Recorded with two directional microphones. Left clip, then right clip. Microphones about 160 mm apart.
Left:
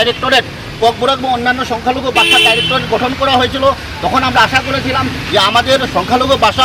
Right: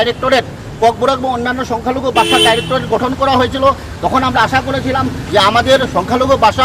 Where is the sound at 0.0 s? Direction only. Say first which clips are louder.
Left 1 dB; 20° right (ahead or behind).